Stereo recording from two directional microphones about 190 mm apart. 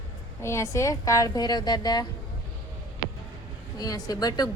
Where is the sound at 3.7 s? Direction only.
20° left (ahead or behind).